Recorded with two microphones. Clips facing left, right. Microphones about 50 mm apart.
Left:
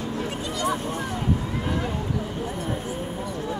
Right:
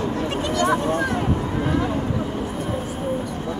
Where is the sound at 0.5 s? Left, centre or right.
Right.